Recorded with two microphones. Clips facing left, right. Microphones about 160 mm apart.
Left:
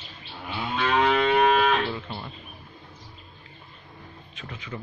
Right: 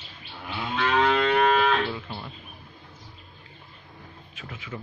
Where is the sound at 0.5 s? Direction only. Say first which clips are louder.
Even; 15° left (ahead or behind).